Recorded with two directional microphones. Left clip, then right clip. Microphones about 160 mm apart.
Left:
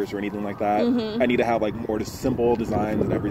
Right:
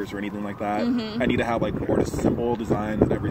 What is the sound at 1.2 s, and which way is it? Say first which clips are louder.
Speech: left 3 dB; 35° right (ahead or behind).